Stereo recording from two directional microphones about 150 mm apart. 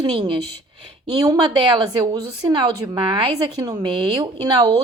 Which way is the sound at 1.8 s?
25° right (ahead or behind).